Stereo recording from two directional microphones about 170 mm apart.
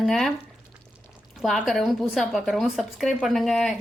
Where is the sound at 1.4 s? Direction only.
Centre (ahead or behind).